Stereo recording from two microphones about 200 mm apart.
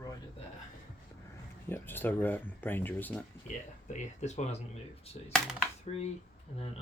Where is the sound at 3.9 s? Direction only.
35° left (ahead or behind).